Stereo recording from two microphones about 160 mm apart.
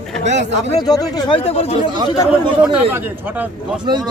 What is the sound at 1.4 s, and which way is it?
Speech, 40° left (ahead or behind).